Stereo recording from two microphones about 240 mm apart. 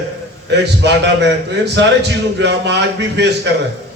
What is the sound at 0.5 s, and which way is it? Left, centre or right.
A man's voice, right.